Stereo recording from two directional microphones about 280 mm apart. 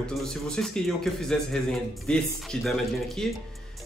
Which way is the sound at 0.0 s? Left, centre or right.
Centre.